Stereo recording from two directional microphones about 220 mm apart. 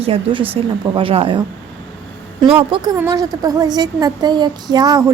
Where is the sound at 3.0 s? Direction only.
15° right (ahead or behind).